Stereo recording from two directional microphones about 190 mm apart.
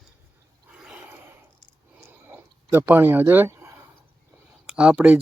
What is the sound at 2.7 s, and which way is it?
Speech, 10° right (ahead or behind).